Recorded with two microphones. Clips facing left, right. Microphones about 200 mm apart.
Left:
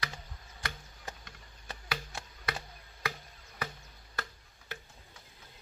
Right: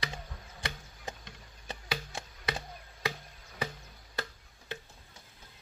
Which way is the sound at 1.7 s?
25° right (ahead or behind).